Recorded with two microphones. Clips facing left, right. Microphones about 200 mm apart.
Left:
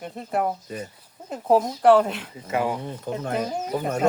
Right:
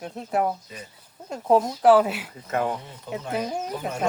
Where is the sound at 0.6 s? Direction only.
50° left (ahead or behind).